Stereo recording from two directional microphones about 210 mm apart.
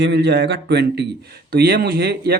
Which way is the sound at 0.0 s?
55° right (ahead or behind).